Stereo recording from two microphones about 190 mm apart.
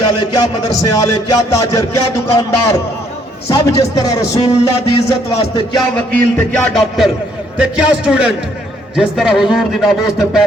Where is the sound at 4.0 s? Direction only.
15° left (ahead or behind).